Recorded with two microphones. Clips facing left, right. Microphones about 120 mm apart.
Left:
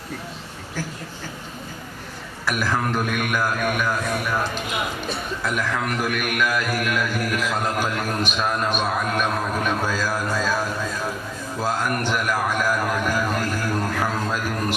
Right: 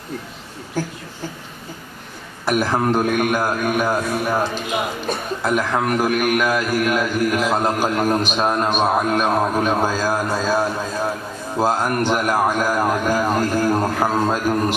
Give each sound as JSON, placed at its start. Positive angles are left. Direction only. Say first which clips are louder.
{"t": 2.5, "sound": "a man's voice", "louder": "right 5 dB", "side_deg": -30}
{"t": 5.4, "sound": "a man's voice", "louder": "right 6 dB", "side_deg": -35}